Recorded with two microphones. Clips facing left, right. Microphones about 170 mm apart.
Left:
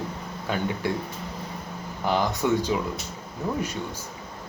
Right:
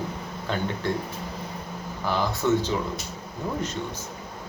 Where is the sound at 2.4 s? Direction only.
15° left (ahead or behind).